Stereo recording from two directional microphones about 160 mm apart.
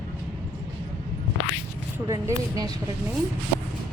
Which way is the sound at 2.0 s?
20° right (ahead or behind).